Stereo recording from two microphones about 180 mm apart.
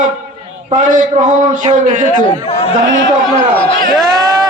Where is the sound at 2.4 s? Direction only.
35° left (ahead or behind).